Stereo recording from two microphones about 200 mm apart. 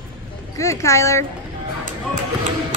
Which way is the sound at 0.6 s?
15° left (ahead or behind).